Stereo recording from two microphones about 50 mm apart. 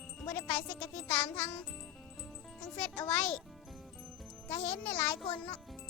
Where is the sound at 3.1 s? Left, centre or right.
Centre.